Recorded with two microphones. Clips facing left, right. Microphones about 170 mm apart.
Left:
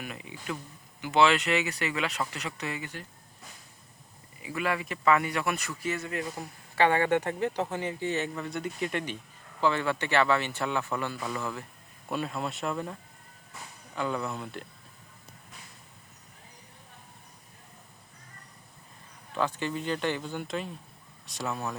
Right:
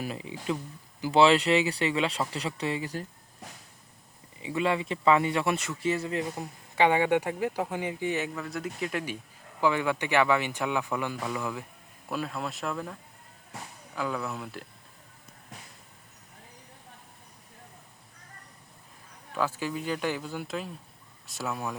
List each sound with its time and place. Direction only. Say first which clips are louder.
0.0 s speech: right 5 dB; 30° right (ahead or behind)
4.4 s speech: right 3 dB; 25° right (ahead or behind)
8.4 s speech: left 1 dB; centre (ahead or behind)
12.0 s speech: left 1 dB; centre (ahead or behind)
19.3 s speech: even; 5° right (ahead or behind)